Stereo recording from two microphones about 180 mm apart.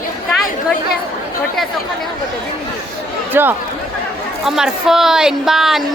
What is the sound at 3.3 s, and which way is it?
A woman's voice, 10° right (ahead or behind).